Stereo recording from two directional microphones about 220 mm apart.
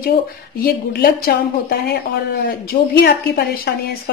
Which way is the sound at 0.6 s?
45° left (ahead or behind).